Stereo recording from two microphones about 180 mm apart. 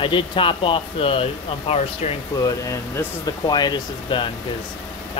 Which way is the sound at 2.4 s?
20° left (ahead or behind).